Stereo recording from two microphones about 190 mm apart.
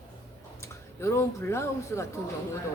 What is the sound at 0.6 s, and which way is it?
Speech, 15° left (ahead or behind).